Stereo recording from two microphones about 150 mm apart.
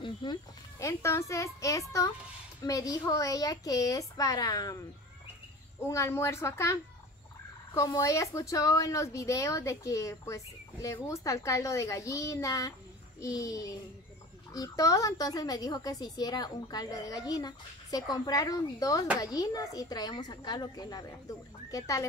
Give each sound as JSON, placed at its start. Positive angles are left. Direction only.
{"t": 0.0, "sound": "speech", "side_deg": 30}
{"t": 5.9, "sound": "a woman's voice", "side_deg": 20}